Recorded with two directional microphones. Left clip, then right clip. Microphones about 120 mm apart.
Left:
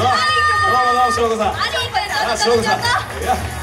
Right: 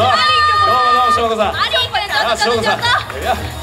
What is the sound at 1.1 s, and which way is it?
Chatter, 50° right (ahead or behind).